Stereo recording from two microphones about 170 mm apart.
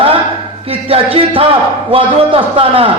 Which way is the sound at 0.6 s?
35° right (ahead or behind).